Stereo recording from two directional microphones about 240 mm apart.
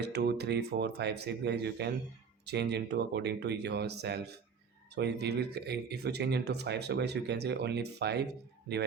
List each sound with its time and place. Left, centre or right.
0.0 s speech: right